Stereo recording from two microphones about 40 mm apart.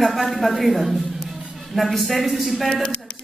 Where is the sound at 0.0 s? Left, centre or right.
Centre.